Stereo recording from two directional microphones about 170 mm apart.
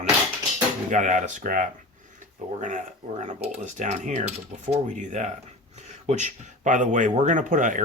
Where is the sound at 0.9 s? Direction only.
45° right (ahead or behind).